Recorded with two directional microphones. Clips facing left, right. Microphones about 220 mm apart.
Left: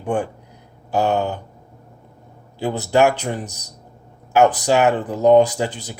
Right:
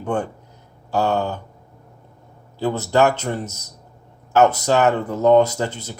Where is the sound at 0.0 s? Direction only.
15° left (ahead or behind).